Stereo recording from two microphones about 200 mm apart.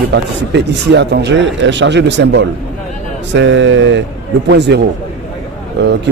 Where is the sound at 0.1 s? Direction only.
60° right (ahead or behind).